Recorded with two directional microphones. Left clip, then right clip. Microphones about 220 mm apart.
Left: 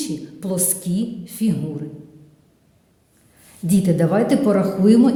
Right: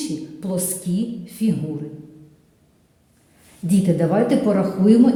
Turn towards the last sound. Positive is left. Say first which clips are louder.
# even
turn(degrees=25)  # may be behind; listen again after turning